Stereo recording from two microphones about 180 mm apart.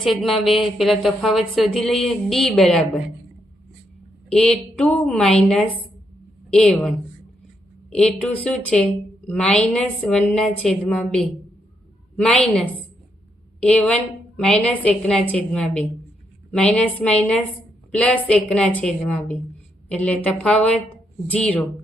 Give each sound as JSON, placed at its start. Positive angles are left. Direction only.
{"t": 0.0, "sound": "speech", "side_deg": 0}
{"t": 4.3, "sound": "a woman's voice", "side_deg": 5}
{"t": 13.6, "sound": "a woman's voice", "side_deg": 5}